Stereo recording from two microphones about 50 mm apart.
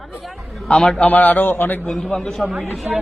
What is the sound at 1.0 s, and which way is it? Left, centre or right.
Speech, left.